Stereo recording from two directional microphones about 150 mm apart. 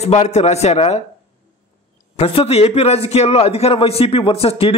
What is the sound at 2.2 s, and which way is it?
A man's voice, 40° left (ahead or behind).